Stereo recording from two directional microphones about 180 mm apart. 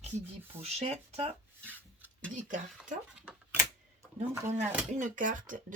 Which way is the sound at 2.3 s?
45° right (ahead or behind).